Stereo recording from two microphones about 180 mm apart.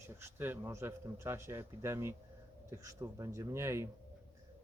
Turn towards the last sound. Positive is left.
turn(degrees=-15)  # may be behind; listen again after turning